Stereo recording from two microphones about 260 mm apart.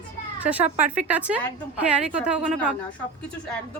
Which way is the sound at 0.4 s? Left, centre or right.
Centre.